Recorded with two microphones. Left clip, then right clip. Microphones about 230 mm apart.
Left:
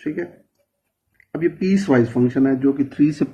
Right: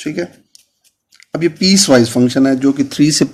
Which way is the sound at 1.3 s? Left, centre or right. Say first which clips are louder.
Right 7 dB; right.